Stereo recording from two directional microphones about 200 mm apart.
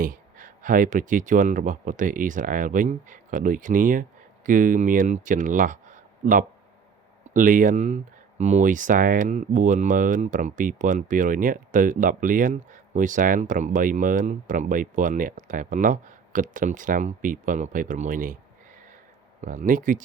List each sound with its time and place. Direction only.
0.0 s speech: 40° right (ahead or behind)
19.4 s speech: 40° right (ahead or behind)